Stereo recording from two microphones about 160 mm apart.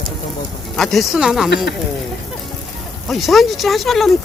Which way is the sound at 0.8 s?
Centre (ahead or behind).